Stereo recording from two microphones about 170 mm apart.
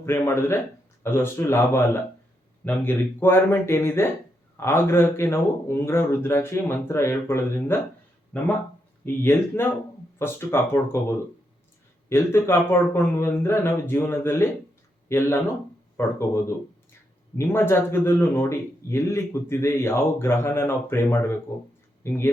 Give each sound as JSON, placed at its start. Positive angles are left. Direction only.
{"t": 0.0, "sound": "a man's voice", "side_deg": 15}
{"t": 9.2, "sound": "a man's voice", "side_deg": 15}